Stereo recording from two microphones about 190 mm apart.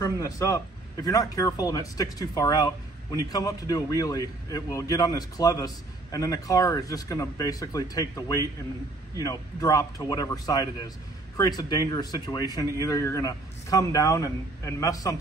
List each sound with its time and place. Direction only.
0.0 s a man's voice: 15° left (ahead or behind)